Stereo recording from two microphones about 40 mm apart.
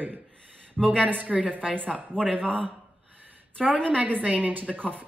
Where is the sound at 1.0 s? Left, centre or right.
Right.